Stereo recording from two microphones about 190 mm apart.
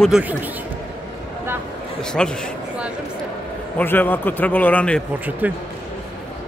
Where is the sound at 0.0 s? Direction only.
5° right (ahead or behind).